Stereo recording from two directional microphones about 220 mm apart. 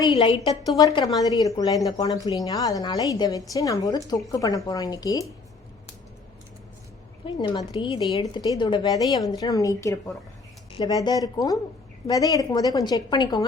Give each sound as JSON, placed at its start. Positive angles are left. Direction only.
{"t": 0.0, "sound": "a woman's voice", "side_deg": 20}
{"t": 7.3, "sound": "a woman's voice", "side_deg": 20}